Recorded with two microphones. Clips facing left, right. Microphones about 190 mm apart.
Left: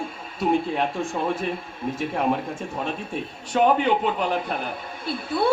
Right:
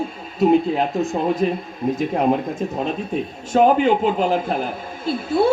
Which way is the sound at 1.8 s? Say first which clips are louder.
Right 7 dB; 20° right (ahead or behind).